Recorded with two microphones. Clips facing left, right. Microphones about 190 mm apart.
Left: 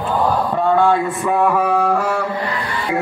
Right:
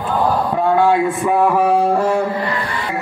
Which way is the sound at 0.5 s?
10° right (ahead or behind).